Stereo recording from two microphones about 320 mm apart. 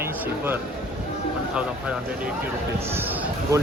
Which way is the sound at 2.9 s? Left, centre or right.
Centre.